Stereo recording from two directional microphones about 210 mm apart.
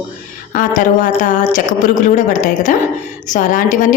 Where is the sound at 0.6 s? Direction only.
40° left (ahead or behind).